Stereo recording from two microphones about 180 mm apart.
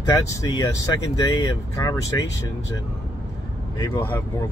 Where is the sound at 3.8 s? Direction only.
15° left (ahead or behind).